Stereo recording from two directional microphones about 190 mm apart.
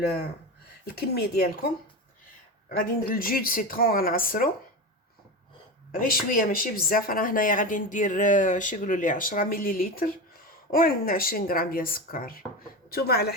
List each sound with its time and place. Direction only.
0.9 s speech: 55° left (ahead or behind)
2.6 s speech: 50° left (ahead or behind)
5.9 s speech: 50° left (ahead or behind)